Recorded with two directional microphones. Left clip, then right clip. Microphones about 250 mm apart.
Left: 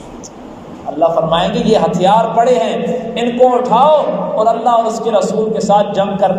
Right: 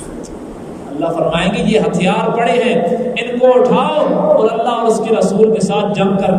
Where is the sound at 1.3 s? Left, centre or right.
Centre.